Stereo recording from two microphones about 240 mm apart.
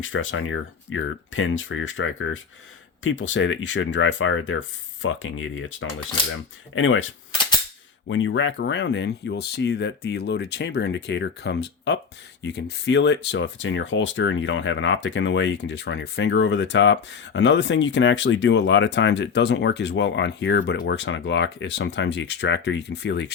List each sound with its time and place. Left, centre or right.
0.0 s speech: left